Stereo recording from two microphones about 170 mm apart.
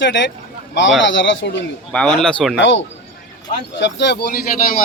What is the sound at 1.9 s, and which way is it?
Speech, 5° left (ahead or behind).